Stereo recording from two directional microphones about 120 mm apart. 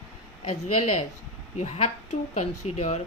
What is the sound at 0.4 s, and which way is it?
Speech, 60° left (ahead or behind).